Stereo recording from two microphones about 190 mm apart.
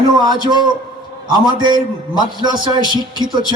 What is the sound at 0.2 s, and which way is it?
A man's voice, 25° right (ahead or behind).